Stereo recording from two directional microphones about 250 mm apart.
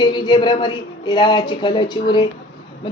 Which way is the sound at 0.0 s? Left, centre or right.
Centre.